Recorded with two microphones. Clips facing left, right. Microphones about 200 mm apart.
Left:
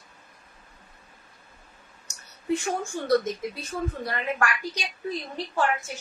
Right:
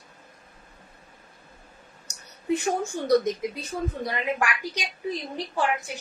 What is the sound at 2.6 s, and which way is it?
Speech, 20° right (ahead or behind).